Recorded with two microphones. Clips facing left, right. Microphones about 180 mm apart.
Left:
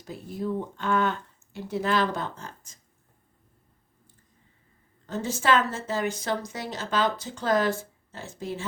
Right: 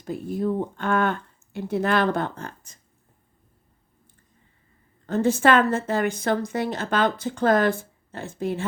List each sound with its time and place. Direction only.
0.0 s a woman's voice: 55° right (ahead or behind)
5.0 s a woman's voice: 55° right (ahead or behind)